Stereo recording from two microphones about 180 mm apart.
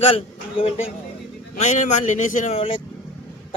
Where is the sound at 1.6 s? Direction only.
45° left (ahead or behind).